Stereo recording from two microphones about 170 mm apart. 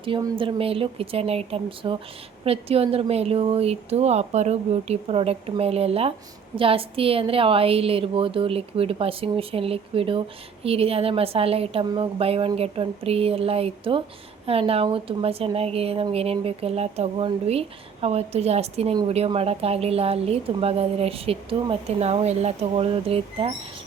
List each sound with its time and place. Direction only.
0.0 s a woman's voice: 30° right (ahead or behind)